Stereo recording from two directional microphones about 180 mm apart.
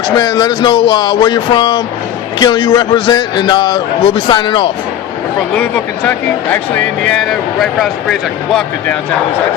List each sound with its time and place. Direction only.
0.2 s a man's voice: 25° left (ahead or behind)
5.5 s speech: 10° left (ahead or behind)